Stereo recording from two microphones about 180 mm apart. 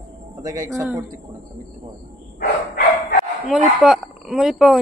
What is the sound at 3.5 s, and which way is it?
Speech, centre (ahead or behind).